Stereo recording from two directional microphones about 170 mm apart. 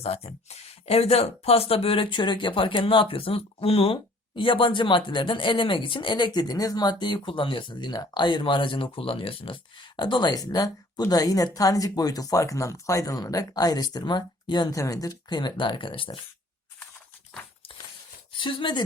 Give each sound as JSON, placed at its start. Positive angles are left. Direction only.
{"t": 0.0, "sound": "speech", "side_deg": 35}
{"t": 18.3, "sound": "speech", "side_deg": 30}